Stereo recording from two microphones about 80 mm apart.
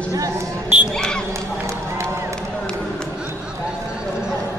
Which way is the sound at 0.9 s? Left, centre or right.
Centre.